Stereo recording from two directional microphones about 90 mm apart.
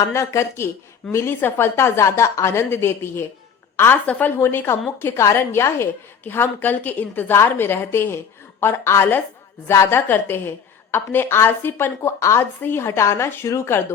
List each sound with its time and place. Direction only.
0.0 s a woman's voice: 35° left (ahead or behind)